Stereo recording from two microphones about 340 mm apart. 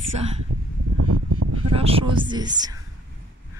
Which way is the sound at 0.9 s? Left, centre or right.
Right.